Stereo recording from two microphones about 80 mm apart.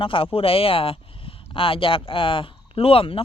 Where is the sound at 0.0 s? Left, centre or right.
Left.